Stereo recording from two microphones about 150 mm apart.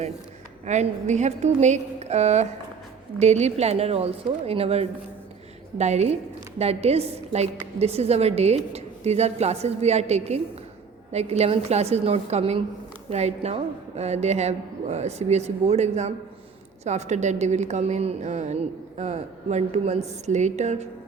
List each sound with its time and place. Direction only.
0.6 s a woman's voice: 50° right (ahead or behind)